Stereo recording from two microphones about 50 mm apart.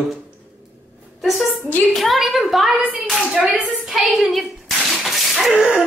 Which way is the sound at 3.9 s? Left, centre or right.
Centre.